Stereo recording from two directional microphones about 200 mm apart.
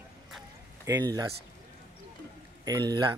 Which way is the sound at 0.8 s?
20° right (ahead or behind).